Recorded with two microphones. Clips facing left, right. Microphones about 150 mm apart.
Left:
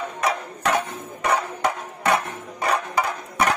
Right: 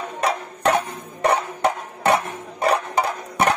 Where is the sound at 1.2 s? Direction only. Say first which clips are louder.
Right 3 dB; 25° right (ahead or behind).